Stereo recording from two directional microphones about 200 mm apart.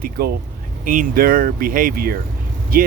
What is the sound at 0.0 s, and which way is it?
Speech, 50° right (ahead or behind).